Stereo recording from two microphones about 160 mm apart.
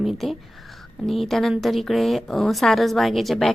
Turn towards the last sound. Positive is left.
turn(degrees=0)  # may be behind; listen again after turning